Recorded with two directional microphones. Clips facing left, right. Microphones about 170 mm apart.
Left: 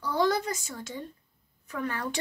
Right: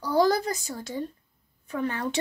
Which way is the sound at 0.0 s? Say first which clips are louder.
Right 4 dB; 40° right (ahead or behind).